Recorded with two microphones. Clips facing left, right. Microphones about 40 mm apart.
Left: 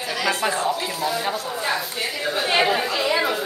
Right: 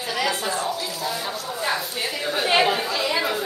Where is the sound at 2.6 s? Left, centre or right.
Centre.